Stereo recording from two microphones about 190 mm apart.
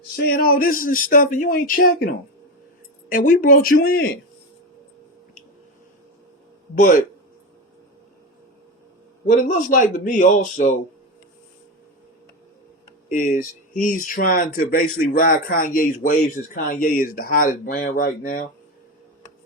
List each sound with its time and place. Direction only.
0.3 s speech: 50° left (ahead or behind)
3.1 s speech: 45° left (ahead or behind)
6.7 s speech: 45° left (ahead or behind)
9.3 s speech: 45° left (ahead or behind)
13.1 s speech: 45° left (ahead or behind)